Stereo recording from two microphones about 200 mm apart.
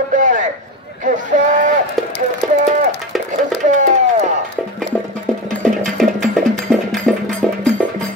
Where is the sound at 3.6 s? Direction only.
35° right (ahead or behind).